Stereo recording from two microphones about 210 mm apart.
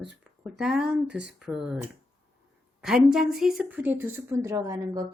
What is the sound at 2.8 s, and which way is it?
A woman's voice, centre (ahead or behind).